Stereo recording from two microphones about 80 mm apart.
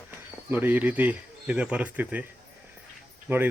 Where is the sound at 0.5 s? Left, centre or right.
Right.